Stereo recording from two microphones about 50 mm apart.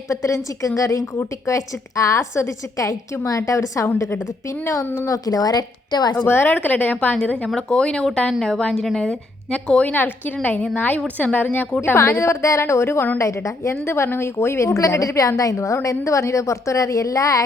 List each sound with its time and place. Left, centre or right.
0.1 s a woman's voice: left
6.2 s a woman's voice: left
7.4 s speech: centre
9.5 s a woman's voice: left
9.9 s speech: left
11.9 s a woman's voice: left
12.3 s a woman's voice: left
13.1 s a woman's voice: left
13.8 s a woman's voice: left